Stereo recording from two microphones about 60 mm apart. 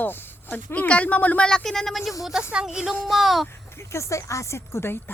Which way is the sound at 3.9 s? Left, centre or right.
Left.